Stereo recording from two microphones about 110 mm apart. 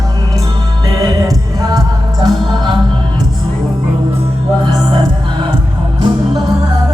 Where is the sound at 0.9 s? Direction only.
35° right (ahead or behind).